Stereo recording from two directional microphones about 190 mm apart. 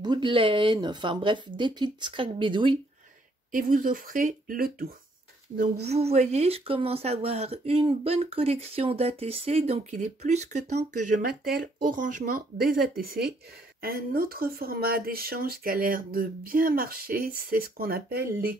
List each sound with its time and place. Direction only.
0.0 s speech: 25° right (ahead or behind)
3.5 s speech: 45° right (ahead or behind)
5.9 s speech: 35° right (ahead or behind); by 18.6 s 55° right (ahead or behind)